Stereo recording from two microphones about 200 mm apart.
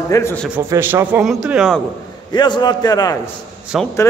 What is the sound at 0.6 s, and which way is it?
A man's voice, 10° right (ahead or behind).